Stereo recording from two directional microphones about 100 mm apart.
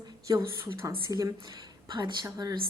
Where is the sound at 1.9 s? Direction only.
50° right (ahead or behind).